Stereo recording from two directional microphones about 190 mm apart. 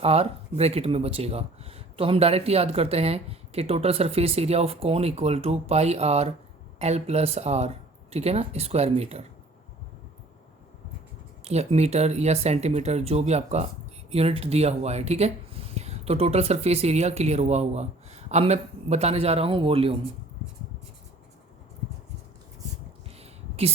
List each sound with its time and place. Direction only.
0.0 s speech: 30° right (ahead or behind)
11.4 s speech: 35° right (ahead or behind)
23.0 s a sound: 30° right (ahead or behind)